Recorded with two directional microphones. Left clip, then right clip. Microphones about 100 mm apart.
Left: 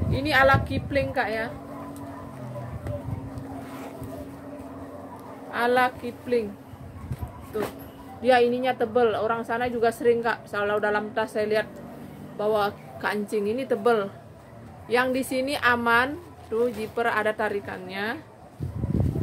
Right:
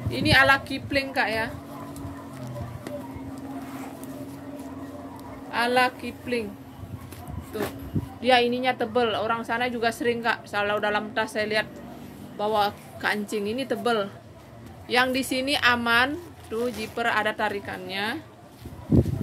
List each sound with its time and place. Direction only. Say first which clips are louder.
0.1 s a woman's voice: right 1 dB; 10° left (ahead or behind)
5.5 s a woman's voice: even; 15° left (ahead or behind)
8.2 s a woman's voice: left 1 dB; 15° left (ahead or behind)